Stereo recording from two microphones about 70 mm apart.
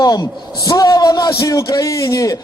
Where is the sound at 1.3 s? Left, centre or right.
Left.